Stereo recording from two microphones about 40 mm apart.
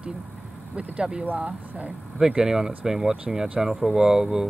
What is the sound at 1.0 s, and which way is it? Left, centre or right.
Speech, centre.